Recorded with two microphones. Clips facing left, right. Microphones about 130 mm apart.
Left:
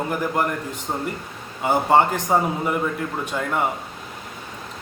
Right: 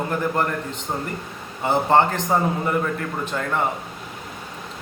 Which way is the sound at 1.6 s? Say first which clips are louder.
Even; 10° left (ahead or behind).